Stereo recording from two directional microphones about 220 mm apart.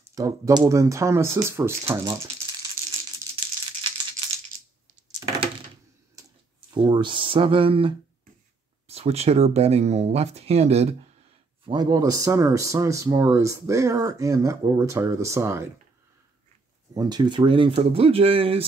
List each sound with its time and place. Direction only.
0.0 s speech: 15° right (ahead or behind)
6.7 s speech: 20° right (ahead or behind)
16.9 s speech: 20° right (ahead or behind)